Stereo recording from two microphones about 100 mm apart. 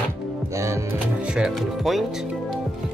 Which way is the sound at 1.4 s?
Centre (ahead or behind).